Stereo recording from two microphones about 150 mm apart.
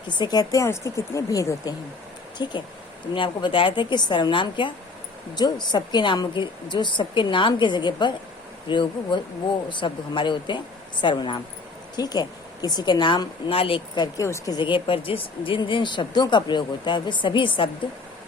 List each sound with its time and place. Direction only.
0.1 s speech: 30° left (ahead or behind)